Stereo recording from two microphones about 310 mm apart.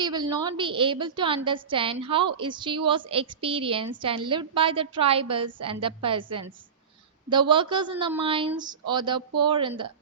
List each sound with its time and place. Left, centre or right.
0.0 s a woman's voice: centre